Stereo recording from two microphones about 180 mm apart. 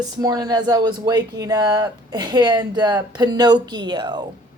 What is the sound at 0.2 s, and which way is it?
Speech, 20° right (ahead or behind).